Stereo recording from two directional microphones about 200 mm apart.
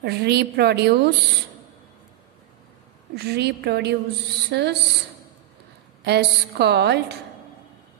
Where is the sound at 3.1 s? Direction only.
55° right (ahead or behind).